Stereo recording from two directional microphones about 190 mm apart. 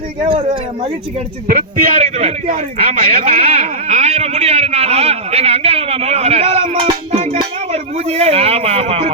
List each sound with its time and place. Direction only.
0.3 s speech: 30° right (ahead or behind)
1.5 s a man's voice: 45° right (ahead or behind); by 9.0 s 30° right (ahead or behind)